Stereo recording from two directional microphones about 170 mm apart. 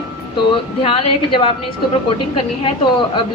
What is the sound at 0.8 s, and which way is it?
Speech, 30° left (ahead or behind).